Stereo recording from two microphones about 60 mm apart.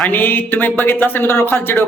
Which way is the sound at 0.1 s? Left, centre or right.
Left.